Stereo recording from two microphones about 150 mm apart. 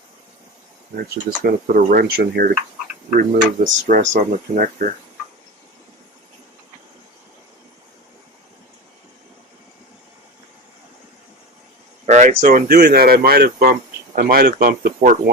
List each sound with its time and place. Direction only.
1.1 s speech: 80° right
3.2 s speech: 60° right (ahead or behind)
12.0 s speech: 50° right (ahead or behind); by 13.7 s 90° right
14.2 s speech: 75° right (ahead or behind)